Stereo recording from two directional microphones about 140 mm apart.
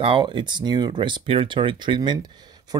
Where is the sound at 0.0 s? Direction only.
40° right (ahead or behind).